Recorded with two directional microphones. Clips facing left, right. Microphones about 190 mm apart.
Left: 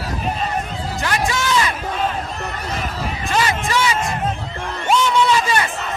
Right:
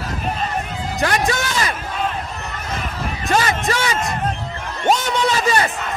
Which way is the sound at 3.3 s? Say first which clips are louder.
Right 1 dB; 45° right (ahead or behind).